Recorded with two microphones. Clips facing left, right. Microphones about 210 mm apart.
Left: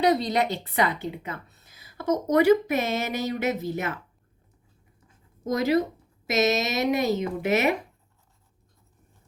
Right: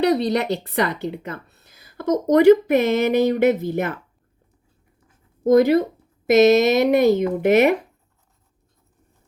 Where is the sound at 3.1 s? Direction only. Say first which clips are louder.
Right 10 dB; 55° right (ahead or behind).